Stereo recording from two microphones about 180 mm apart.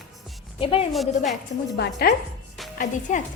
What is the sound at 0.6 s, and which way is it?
Speech, 30° left (ahead or behind).